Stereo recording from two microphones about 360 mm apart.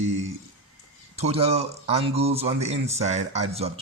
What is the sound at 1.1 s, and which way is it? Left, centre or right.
Speech, centre.